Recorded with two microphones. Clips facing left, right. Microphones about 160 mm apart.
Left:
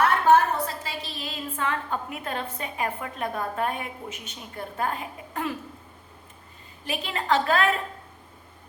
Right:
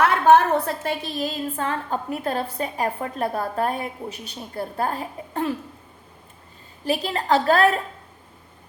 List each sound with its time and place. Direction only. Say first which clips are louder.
0.0 s a woman's voice: right 3 dB; 75° right (ahead or behind); by 5.5 s 30° right (ahead or behind)
6.8 s a woman's voice: right 4 dB; 35° right (ahead or behind)